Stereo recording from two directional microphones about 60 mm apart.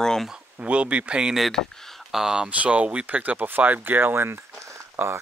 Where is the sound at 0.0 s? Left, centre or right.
Centre.